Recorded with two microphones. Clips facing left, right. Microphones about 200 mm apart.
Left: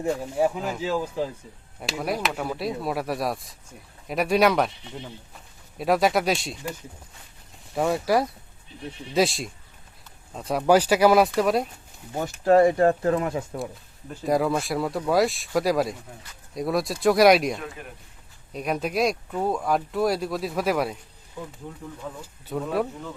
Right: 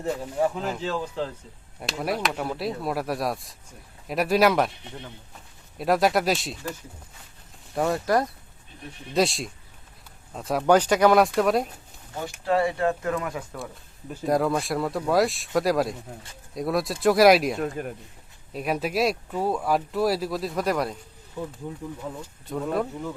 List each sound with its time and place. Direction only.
0.2 s speech: 10° left (ahead or behind)
5.7 s speech: centre (ahead or behind)
7.7 s speech: centre (ahead or behind)
12.5 s speech: 45° left (ahead or behind); by 13.6 s 30° left (ahead or behind)
14.1 s speech: centre (ahead or behind)
17.6 s a man's voice: 45° right (ahead or behind)
18.5 s speech: 5° right (ahead or behind)
22.2 s speech: centre (ahead or behind)